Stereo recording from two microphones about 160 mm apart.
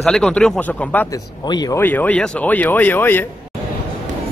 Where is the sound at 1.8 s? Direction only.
10° left (ahead or behind).